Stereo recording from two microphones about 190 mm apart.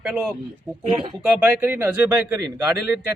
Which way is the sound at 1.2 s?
10° right (ahead or behind).